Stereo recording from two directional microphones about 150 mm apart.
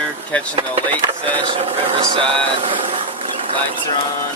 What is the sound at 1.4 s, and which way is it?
Speech, 40° right (ahead or behind).